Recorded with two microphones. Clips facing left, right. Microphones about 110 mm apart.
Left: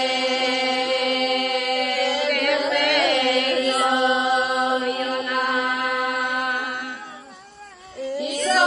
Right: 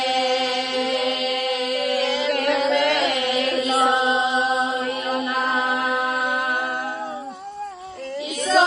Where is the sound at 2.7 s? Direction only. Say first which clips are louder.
Even; 30° right (ahead or behind).